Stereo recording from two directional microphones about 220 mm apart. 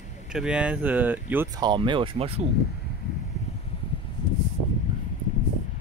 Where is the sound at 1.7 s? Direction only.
20° right (ahead or behind).